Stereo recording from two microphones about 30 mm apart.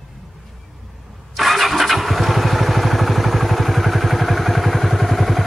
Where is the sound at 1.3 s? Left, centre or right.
Centre.